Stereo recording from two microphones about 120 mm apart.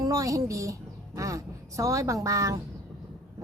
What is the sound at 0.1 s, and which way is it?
A woman's voice, 30° right (ahead or behind).